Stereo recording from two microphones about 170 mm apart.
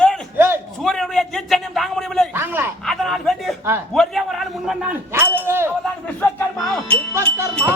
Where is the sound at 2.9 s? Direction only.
Centre (ahead or behind).